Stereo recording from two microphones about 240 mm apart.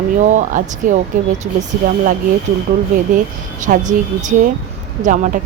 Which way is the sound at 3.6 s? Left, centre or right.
Right.